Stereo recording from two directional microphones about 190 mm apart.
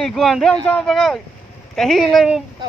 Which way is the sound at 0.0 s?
Centre (ahead or behind).